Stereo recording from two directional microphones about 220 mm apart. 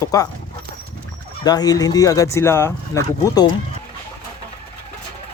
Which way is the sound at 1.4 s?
15° left (ahead or behind).